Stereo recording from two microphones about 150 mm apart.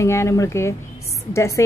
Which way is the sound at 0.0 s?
20° left (ahead or behind).